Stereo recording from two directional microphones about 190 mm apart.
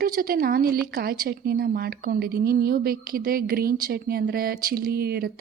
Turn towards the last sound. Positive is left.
turn(degrees=-55)  # may be behind; listen again after turning